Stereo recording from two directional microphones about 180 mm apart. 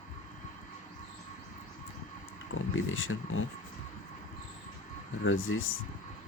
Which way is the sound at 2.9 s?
90° left.